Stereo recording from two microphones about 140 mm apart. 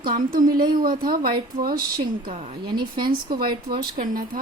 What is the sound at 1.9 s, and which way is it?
A woman's voice, 35° right (ahead or behind).